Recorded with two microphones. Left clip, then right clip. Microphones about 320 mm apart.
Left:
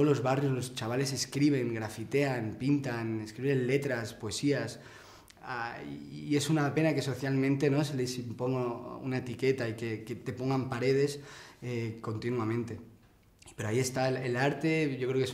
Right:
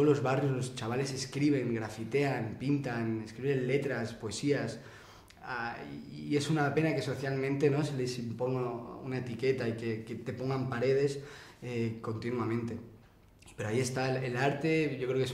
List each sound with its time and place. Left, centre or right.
0.0 s speech: left